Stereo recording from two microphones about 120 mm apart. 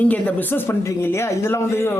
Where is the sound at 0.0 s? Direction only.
15° left (ahead or behind).